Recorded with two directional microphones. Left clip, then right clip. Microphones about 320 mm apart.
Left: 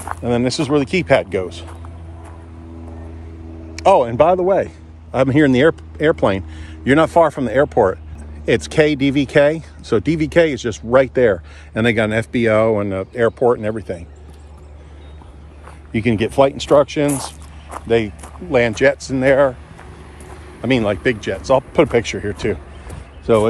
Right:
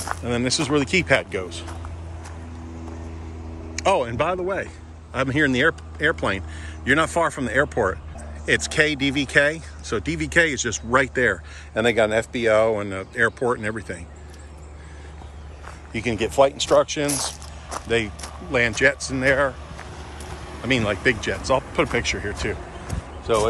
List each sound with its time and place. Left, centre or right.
0.0 s speech: centre
3.7 s a man's voice: centre
11.7 s speech: left; by 14.0 s centre
15.9 s speech: centre
17.6 s speech: centre
20.6 s speech: centre